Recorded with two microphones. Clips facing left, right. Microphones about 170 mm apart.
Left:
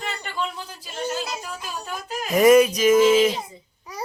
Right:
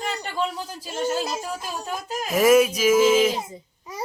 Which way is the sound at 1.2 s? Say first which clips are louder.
Right 3 dB; 30° right (ahead or behind).